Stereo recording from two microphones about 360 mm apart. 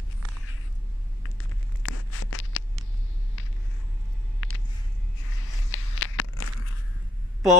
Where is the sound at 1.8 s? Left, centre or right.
Left.